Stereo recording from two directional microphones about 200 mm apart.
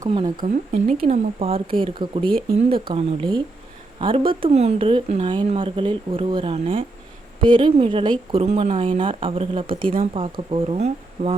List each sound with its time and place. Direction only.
0.0 s speech: 25° right (ahead or behind)
0.3 s speech: 40° right (ahead or behind)